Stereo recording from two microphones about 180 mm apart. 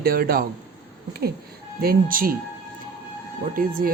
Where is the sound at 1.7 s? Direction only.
55° right (ahead or behind).